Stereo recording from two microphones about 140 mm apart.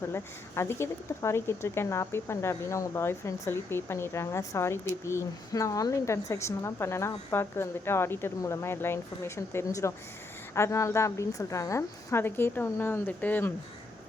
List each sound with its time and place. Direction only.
0.1 s speech: 20° left (ahead or behind)